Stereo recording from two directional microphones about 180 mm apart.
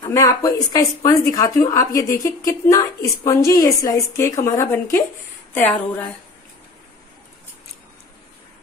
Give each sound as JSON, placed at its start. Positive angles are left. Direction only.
{"t": 0.1, "sound": "speech", "side_deg": 15}